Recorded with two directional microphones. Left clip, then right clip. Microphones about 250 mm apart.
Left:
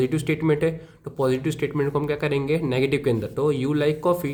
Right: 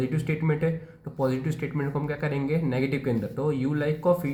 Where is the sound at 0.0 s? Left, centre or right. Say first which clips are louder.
Left 7 dB; left.